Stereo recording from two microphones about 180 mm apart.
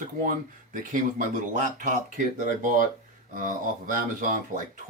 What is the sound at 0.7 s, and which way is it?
Speech, 45° right (ahead or behind).